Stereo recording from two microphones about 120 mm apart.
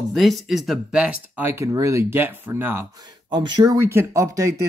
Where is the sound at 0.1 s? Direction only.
Centre (ahead or behind); by 2.9 s 20° right (ahead or behind).